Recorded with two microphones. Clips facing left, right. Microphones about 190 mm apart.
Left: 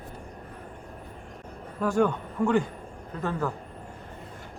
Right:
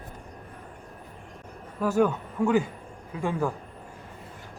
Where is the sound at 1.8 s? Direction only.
5° right (ahead or behind).